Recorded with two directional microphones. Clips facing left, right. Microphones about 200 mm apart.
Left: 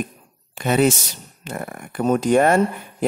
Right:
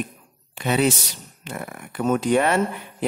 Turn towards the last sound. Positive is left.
turn(degrees=45)  # may be behind; listen again after turning